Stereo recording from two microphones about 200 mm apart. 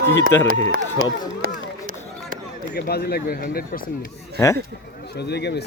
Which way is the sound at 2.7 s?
55° left (ahead or behind).